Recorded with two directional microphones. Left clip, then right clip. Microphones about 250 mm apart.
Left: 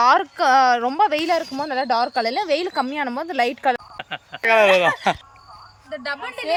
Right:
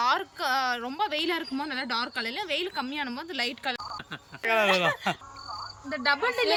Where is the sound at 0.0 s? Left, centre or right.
Left.